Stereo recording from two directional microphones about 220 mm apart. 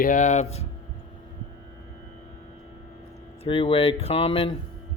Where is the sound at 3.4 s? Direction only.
25° left (ahead or behind).